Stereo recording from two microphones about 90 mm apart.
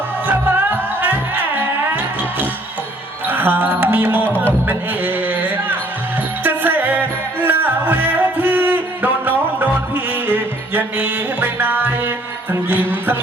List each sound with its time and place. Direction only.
0.3 s music: 20° right (ahead or behind)
3.2 s music: 20° right (ahead or behind)
4.7 s a sound: 20° right (ahead or behind)
6.4 s music: 20° right (ahead or behind)